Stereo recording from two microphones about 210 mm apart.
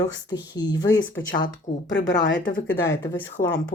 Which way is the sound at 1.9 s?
60° left (ahead or behind).